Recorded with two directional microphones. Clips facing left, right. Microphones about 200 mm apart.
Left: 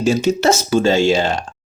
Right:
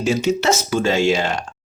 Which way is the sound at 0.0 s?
35° left (ahead or behind).